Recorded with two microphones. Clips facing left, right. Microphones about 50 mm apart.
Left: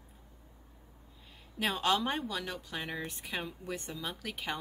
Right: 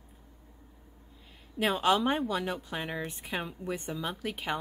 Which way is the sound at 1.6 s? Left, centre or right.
Centre.